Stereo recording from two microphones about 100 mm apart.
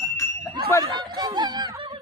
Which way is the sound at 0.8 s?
45° right (ahead or behind).